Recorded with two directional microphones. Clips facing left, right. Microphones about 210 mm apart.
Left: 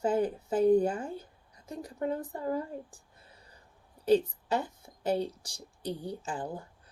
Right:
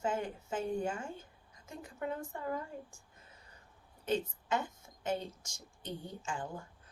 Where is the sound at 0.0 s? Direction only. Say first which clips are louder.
Left 8 dB; 35° left (ahead or behind).